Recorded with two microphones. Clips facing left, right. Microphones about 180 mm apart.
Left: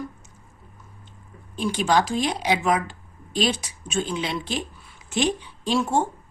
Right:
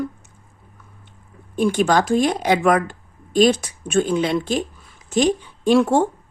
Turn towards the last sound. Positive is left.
turn(degrees=-60)  # may be behind; listen again after turning